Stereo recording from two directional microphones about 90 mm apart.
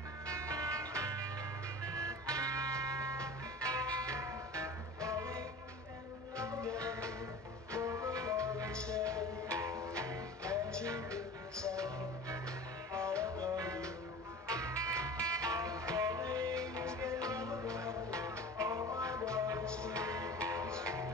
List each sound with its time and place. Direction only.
0.3 s music: 40° right (ahead or behind)
8.7 s music: 10° left (ahead or behind)
9.0 s music: 35° right (ahead or behind)
19.6 s music: 10° left (ahead or behind)
19.9 s music: 35° right (ahead or behind)